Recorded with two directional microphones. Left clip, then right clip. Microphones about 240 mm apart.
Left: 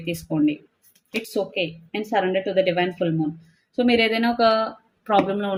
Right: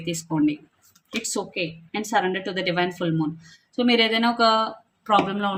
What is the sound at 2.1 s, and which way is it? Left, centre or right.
Speech, right.